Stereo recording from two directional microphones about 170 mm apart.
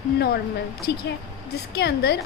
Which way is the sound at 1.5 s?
70° left (ahead or behind).